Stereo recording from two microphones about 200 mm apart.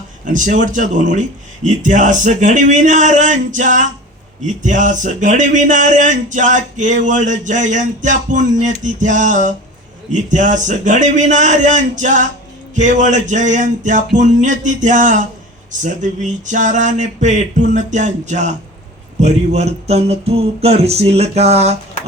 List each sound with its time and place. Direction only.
0.3 s speech: 40° right (ahead or behind)